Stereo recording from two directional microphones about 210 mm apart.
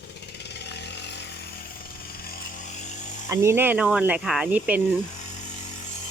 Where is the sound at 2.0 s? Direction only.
45° left (ahead or behind).